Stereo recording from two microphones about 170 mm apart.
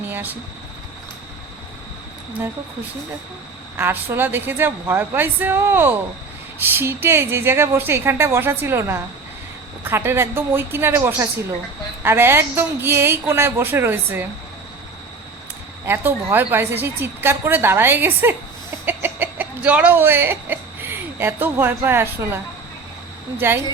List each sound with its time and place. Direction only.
0.0 s vehicle: 10° right (ahead or behind)
3.8 s a woman's voice: 15° right (ahead or behind)
15.9 s a woman's voice: 10° right (ahead or behind)
23.4 s a woman's voice: 15° right (ahead or behind)